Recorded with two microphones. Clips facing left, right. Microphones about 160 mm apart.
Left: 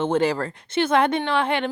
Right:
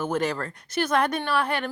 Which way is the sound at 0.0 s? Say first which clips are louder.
Left 5 dB; 30° left (ahead or behind).